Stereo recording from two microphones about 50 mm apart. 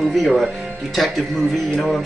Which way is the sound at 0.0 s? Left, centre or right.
Centre.